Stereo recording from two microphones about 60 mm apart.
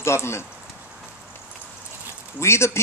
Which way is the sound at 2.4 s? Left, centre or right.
Left.